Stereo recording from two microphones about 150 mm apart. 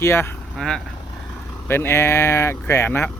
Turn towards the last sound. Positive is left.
turn(degrees=15)  # may be behind; listen again after turning